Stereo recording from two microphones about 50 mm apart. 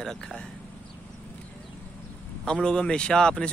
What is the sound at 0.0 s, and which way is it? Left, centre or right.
Speech, centre.